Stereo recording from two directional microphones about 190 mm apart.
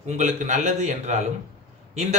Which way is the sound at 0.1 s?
40° right (ahead or behind).